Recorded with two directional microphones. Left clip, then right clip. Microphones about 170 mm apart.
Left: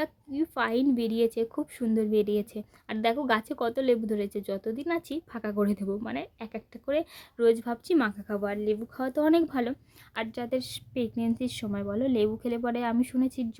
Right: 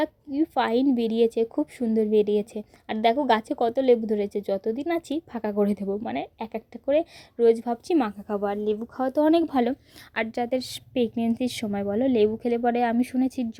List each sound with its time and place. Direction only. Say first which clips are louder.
0.0 s a woman's voice: right 5 dB; 15° right (ahead or behind)